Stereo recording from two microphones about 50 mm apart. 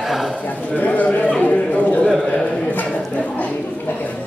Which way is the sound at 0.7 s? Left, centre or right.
Left.